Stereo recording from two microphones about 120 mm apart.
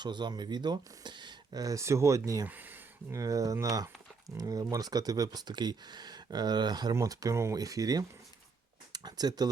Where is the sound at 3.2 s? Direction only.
30° right (ahead or behind).